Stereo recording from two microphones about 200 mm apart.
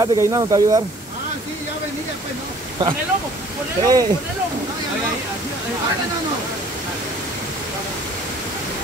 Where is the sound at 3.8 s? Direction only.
20° right (ahead or behind).